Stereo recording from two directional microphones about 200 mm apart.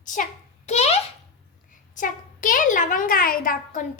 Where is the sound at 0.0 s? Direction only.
40° left (ahead or behind).